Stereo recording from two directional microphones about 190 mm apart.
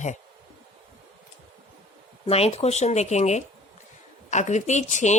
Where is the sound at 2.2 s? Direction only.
30° left (ahead or behind).